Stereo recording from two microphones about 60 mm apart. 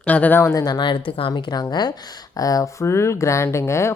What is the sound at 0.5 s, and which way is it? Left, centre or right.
Speech, left.